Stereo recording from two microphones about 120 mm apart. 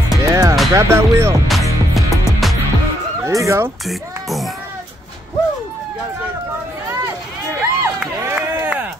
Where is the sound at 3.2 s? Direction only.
25° right (ahead or behind).